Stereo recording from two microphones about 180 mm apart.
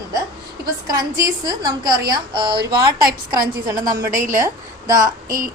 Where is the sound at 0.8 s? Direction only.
20° right (ahead or behind).